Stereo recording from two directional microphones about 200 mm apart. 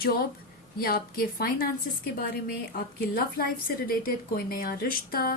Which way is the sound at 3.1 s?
45° left (ahead or behind).